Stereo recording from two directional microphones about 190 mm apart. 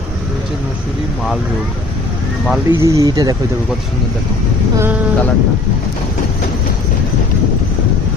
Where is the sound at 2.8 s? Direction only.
15° right (ahead or behind).